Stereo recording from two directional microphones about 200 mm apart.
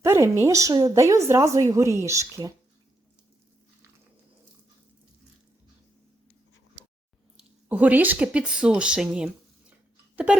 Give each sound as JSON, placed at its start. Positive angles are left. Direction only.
{"t": 0.0, "sound": "a woman's voice", "side_deg": -15}
{"t": 7.7, "sound": "speech", "side_deg": -10}